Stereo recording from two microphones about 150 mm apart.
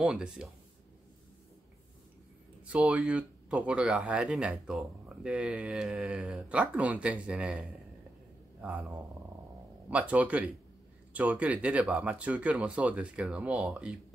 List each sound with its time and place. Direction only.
0.0 s speech: 5° right (ahead or behind)
2.7 s speech: 5° right (ahead or behind)
8.8 s speech: 20° right (ahead or behind)
9.8 s speech: 10° right (ahead or behind)